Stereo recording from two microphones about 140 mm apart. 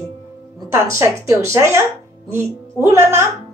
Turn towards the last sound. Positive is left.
turn(degrees=-15)  # may be behind; listen again after turning